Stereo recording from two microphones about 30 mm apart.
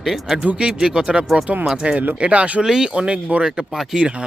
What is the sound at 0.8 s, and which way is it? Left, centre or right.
Speech, right.